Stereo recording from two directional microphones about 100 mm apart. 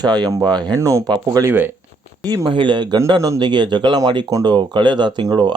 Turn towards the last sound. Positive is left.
turn(degrees=-50)  # may be behind; listen again after turning